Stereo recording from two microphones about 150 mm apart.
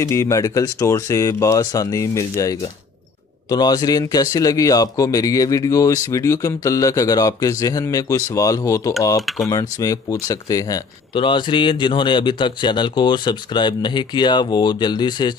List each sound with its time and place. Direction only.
0.0 s a man's voice: 20° left (ahead or behind)
11.1 s speech: 35° left (ahead or behind)